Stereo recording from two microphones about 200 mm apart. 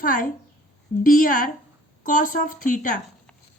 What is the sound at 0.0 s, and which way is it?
Speech, 45° left (ahead or behind).